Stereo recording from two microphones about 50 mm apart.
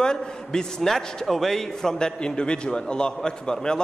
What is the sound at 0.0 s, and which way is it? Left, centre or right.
A man's voice, centre.